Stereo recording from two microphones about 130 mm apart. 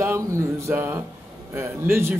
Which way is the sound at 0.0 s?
20° right (ahead or behind).